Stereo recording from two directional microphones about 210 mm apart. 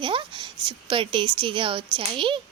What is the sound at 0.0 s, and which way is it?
A woman's voice, 25° right (ahead or behind).